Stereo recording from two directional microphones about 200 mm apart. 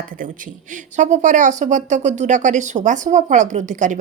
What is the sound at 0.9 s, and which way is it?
Speech, 35° right (ahead or behind).